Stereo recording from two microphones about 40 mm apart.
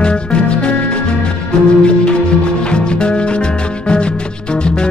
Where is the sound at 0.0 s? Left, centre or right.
Left.